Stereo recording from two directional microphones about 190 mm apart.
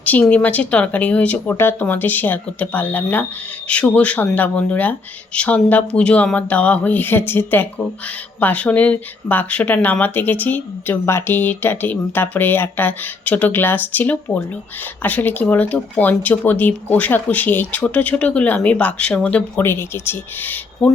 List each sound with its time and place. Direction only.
0.0 s speech: 10° left (ahead or behind)